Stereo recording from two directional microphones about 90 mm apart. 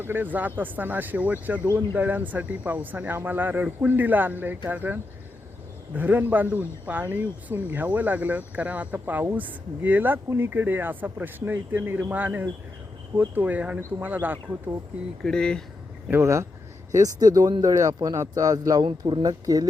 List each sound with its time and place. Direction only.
0.0 s speech: 20° right (ahead or behind)
1.6 s speech: 30° right (ahead or behind)
2.0 s speech: 20° right (ahead or behind)
15.2 s speech: 10° left (ahead or behind)
16.0 s speech: 30° right (ahead or behind)
17.0 s speech: 45° right (ahead or behind)
18.9 s speech: 55° right (ahead or behind)